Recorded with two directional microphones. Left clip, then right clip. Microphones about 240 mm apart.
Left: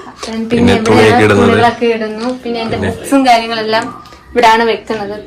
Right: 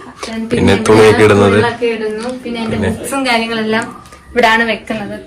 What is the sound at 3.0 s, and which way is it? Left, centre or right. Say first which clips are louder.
Speech: left 7 dB; left.